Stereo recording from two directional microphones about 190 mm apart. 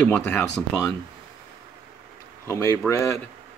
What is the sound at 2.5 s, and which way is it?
Speech, 15° left (ahead or behind).